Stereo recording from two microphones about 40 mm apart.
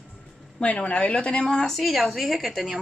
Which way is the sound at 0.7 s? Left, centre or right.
Left.